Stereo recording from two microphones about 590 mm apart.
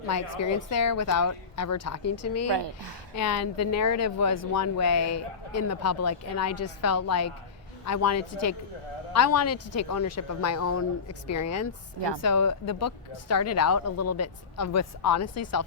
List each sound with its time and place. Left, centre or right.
0.1 s speech: left
2.5 s speech: right
3.2 s speech: left